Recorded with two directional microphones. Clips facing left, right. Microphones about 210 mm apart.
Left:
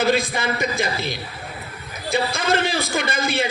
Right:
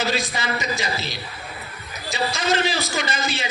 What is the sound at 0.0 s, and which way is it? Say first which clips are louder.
A man's voice: left 5 dB; 55° left (ahead or behind).